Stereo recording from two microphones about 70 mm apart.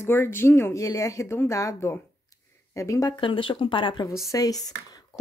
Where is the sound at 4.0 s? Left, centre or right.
Left.